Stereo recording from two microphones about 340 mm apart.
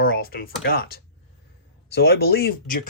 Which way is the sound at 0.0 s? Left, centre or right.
Left.